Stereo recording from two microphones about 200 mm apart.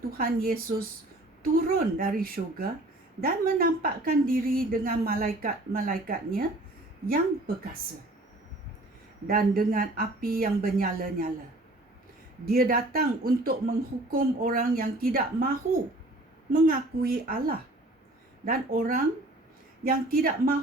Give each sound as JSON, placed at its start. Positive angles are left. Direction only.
{"t": 0.2, "sound": "a woman's voice", "side_deg": -45}
{"t": 9.2, "sound": "a woman's voice", "side_deg": -45}
{"t": 12.5, "sound": "a woman's voice", "side_deg": -45}